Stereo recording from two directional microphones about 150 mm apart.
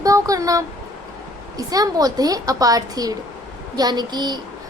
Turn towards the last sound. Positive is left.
turn(degrees=-30)  # may be behind; listen again after turning